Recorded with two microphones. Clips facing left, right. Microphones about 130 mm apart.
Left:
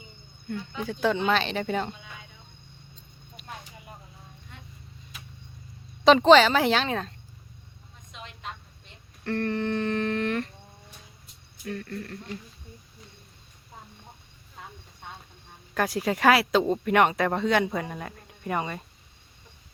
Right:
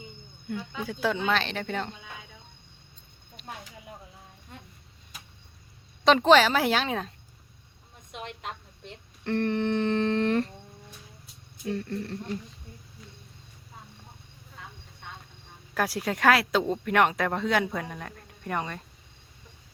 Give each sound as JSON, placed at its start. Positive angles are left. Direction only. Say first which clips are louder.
{"t": 0.4, "sound": "speech", "louder": "left 1 dB", "side_deg": -5}
{"t": 6.1, "sound": "speech", "louder": "left 3 dB", "side_deg": 0}
{"t": 8.1, "sound": "a sound", "louder": "right 3 dB", "side_deg": -65}
{"t": 9.2, "sound": "humming", "louder": "right 1 dB", "side_deg": -20}
{"t": 11.6, "sound": "humming", "louder": "right 3 dB", "side_deg": -25}
{"t": 15.7, "sound": "speech", "louder": "left 2 dB", "side_deg": 0}